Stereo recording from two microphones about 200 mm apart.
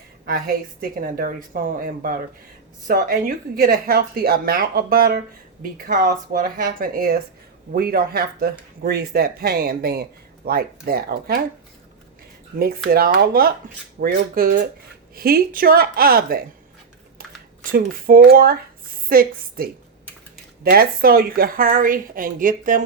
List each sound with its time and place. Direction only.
0.3 s speech: 45° right (ahead or behind)
12.5 s speech: 50° right (ahead or behind)